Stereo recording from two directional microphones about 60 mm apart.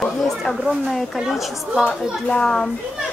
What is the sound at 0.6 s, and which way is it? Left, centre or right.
A woman's voice, centre.